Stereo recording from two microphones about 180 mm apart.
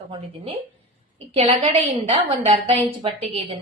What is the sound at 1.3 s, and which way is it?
A woman's voice, 30° right (ahead or behind).